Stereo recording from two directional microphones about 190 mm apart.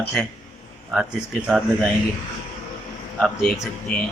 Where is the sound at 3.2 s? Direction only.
Centre (ahead or behind).